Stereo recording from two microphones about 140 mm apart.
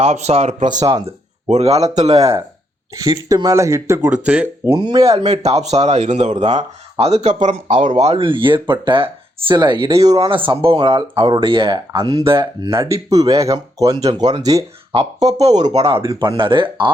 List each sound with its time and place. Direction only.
0.0 s speech: 50° right (ahead or behind)
0.7 s speech: 30° right (ahead or behind)
1.0 s speech: 50° right (ahead or behind)
2.9 s speech: 25° right (ahead or behind); by 4.4 s 10° right (ahead or behind)
4.6 s speech: 25° right (ahead or behind)
5.0 s speech: 50° right (ahead or behind)
7.4 s speech: 60° right (ahead or behind); by 9.8 s 35° right (ahead or behind)
9.8 s speech: 25° right (ahead or behind)
11.9 s speech: 25° right (ahead or behind)
12.2 s speech: 35° right (ahead or behind)
12.7 s speech: 20° right (ahead or behind)
14.9 s speech: 50° right (ahead or behind)
15.9 s speech: 30° right (ahead or behind)